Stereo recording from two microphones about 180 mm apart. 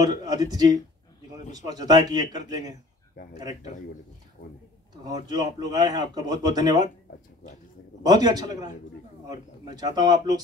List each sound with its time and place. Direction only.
0.0 s speech: 20° right (ahead or behind)
5.0 s speech: 20° right (ahead or behind)
8.0 s speech: 20° right (ahead or behind)